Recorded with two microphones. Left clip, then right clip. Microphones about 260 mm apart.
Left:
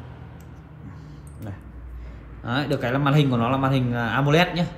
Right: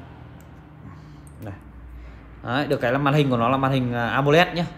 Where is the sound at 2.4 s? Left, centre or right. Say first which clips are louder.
Right 3 dB; right.